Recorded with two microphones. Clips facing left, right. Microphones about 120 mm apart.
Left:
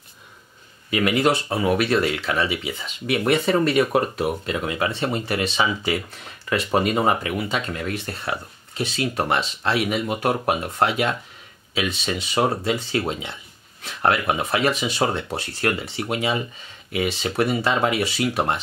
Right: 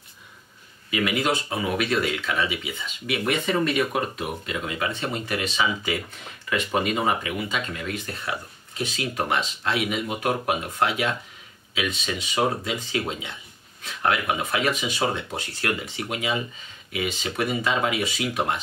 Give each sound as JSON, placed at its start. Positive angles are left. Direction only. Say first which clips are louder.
{"t": 0.8, "sound": "speech", "louder": "left 4 dB", "side_deg": 40}